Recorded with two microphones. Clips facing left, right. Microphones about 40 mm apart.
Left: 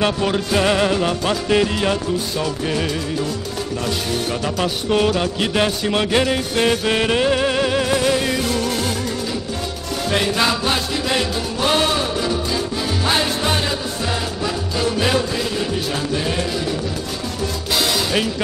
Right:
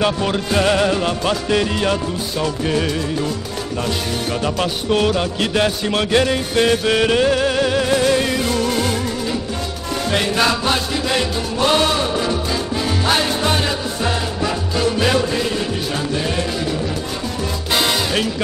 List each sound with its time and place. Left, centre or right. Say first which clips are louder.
0.2 s music: even; centre
10.0 s music: right 1 dB; centre
17.7 s music: right 2 dB; centre